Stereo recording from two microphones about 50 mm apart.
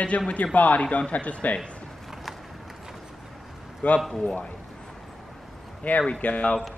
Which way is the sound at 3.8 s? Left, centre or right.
Left.